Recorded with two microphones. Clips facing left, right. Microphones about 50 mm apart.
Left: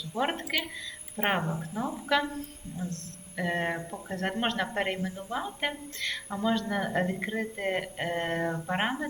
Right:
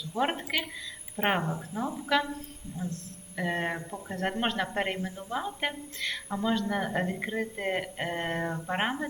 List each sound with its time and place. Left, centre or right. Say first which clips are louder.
0.2 s a woman's voice: right 1 dB; centre
1.7 s a woman's voice: even; right
2.8 s a man's voice: right 1 dB; right
3.3 s a woman's voice: left 1 dB; centre